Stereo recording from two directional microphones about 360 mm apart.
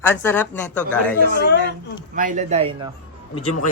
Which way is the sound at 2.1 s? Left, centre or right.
Right.